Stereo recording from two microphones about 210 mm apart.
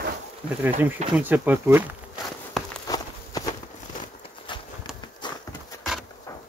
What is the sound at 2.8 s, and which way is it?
Walk, 20° left (ahead or behind).